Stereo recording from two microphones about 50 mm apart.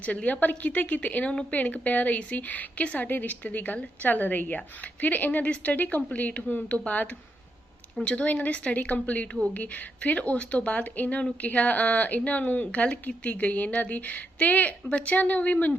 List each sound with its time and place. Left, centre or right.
0.0 s a woman's voice: left